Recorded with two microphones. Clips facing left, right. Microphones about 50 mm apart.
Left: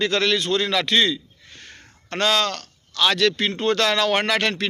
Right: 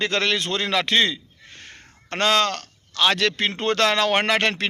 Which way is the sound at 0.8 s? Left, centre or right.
Right.